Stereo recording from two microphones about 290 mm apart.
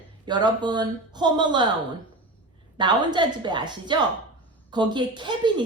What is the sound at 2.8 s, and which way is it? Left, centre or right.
A woman's voice, centre.